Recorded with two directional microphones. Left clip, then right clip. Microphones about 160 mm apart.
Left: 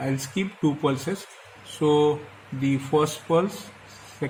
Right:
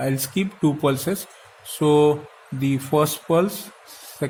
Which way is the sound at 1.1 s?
90° right.